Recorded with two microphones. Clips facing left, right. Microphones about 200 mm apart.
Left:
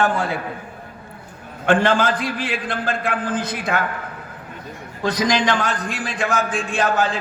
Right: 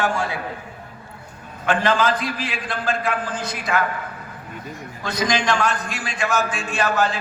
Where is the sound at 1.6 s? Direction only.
50° left (ahead or behind).